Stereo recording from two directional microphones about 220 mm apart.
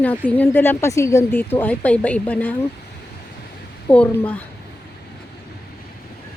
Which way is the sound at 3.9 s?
5° left (ahead or behind).